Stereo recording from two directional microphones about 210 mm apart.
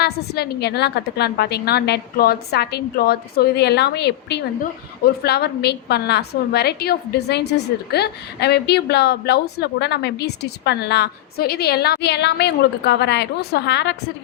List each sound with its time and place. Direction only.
0.0 s a woman's voice: 50° left (ahead or behind)